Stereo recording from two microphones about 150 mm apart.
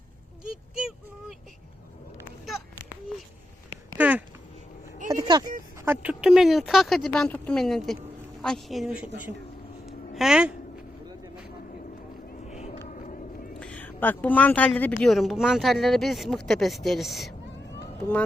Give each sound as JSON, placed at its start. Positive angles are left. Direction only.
{"t": 3.9, "sound": "a sound", "side_deg": -10}
{"t": 5.0, "sound": "vehicle", "side_deg": -25}
{"t": 5.8, "sound": "speech", "side_deg": -15}
{"t": 9.8, "sound": "a sound", "side_deg": -5}
{"t": 12.5, "sound": "vehicle", "side_deg": 45}
{"t": 13.0, "sound": "vehicle", "side_deg": 60}
{"t": 13.6, "sound": "speech", "side_deg": 10}